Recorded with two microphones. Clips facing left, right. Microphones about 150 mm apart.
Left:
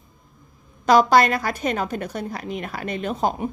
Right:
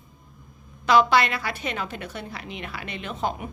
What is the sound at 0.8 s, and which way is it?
A woman's voice, 40° left (ahead or behind).